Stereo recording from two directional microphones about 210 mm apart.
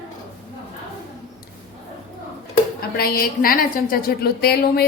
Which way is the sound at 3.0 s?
45° left (ahead or behind).